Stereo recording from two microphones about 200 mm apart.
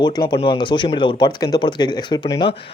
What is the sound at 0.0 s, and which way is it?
Speech, 20° left (ahead or behind).